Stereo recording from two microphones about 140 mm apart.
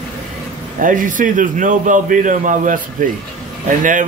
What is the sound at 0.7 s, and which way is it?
A man's voice, 70° right (ahead or behind).